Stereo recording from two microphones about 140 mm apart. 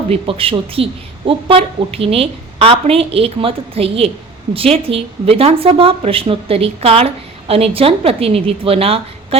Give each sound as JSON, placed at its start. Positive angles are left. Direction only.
{"t": 0.1, "sound": "speech", "side_deg": -40}